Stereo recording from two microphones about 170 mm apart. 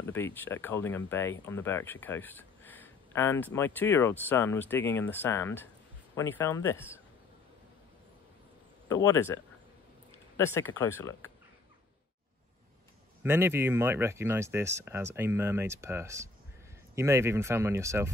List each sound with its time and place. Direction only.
0.0 s speech: 10° left (ahead or behind)
8.8 s speech: 20° left (ahead or behind)
13.2 s speech: 15° right (ahead or behind)